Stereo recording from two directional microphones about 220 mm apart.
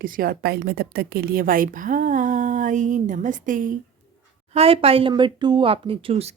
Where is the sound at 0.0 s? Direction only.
40° right (ahead or behind).